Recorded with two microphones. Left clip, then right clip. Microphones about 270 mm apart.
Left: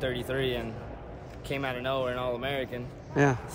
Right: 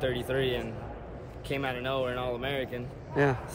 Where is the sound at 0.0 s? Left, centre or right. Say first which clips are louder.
Right 1 dB; centre.